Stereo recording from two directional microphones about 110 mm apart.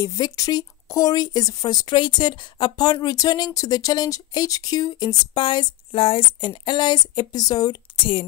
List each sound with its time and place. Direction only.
0.0 s speech: 30° left (ahead or behind)
7.9 s a woman's voice: 55° left (ahead or behind)